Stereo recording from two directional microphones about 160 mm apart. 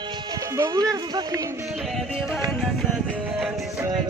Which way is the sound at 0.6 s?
20° right (ahead or behind).